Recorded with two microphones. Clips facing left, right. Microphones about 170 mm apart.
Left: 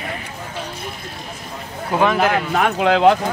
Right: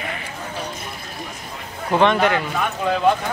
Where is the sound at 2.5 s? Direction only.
75° left (ahead or behind).